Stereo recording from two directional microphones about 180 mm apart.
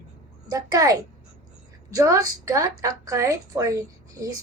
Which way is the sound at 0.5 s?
20° right (ahead or behind).